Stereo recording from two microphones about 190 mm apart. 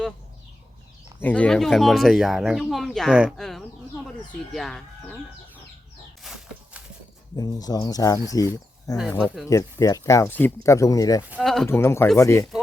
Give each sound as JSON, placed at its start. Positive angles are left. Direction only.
{"t": 1.2, "sound": "speech", "side_deg": 5}
{"t": 6.2, "sound": "a sound", "side_deg": 0}
{"t": 7.3, "sound": "speech", "side_deg": 20}
{"t": 9.0, "sound": "speech", "side_deg": 0}
{"t": 9.5, "sound": "speech", "side_deg": 15}
{"t": 11.3, "sound": "speech", "side_deg": 0}
{"t": 11.7, "sound": "speech", "side_deg": 15}